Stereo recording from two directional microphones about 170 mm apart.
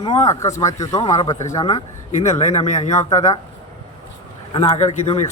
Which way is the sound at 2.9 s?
20° left (ahead or behind).